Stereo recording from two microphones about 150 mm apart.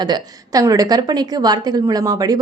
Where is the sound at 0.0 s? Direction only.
30° right (ahead or behind).